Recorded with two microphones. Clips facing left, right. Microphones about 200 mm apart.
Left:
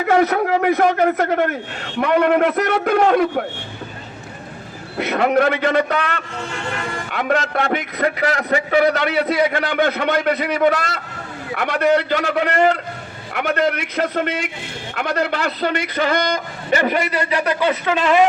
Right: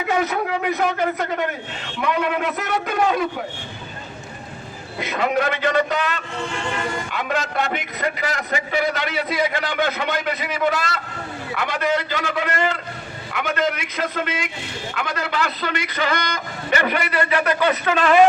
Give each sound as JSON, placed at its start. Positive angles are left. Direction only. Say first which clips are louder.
{"t": 0.1, "sound": "a man's voice", "louder": "left 6 dB", "side_deg": 55}
{"t": 4.9, "sound": "a man's voice", "louder": "left 5 dB", "side_deg": 60}
{"t": 16.7, "sound": "a man's voice", "louder": "left 3 dB", "side_deg": 35}